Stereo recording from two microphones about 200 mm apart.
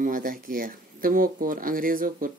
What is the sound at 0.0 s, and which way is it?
Speech, 45° right (ahead or behind).